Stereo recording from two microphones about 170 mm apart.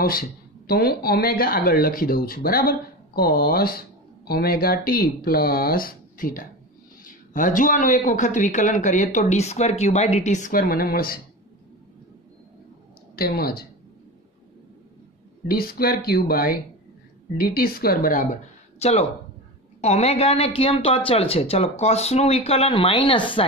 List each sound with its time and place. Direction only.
0.0 s speech: 60° left (ahead or behind)
13.1 s speech: 65° left (ahead or behind)
15.4 s speech: 60° left (ahead or behind)
18.8 s speech: 40° left (ahead or behind)